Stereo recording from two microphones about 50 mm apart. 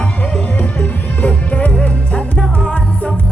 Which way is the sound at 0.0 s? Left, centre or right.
Left.